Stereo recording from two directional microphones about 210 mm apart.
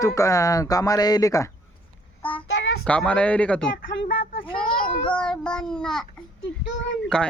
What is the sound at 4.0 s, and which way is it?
Speech, 25° left (ahead or behind).